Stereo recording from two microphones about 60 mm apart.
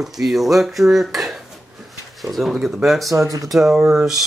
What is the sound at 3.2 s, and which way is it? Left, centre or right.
Speech, right.